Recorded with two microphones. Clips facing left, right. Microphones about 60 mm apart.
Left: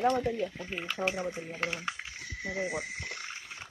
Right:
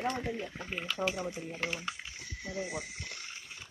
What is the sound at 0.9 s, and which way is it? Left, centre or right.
Speech, left.